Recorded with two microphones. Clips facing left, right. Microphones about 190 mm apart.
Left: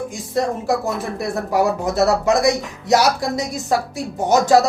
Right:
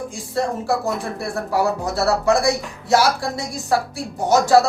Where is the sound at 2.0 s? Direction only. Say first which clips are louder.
Left 2 dB; 20° left (ahead or behind).